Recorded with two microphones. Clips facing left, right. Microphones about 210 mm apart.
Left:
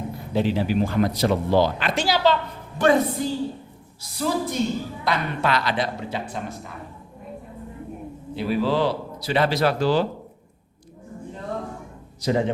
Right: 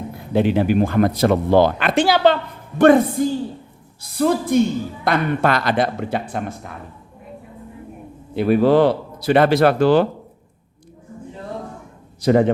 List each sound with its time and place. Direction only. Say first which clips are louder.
0.3 s speech: right 5 dB; 55° right (ahead or behind)
8.4 s speech: right 8 dB; 55° right (ahead or behind)
12.2 s speech: right 7 dB; 55° right (ahead or behind)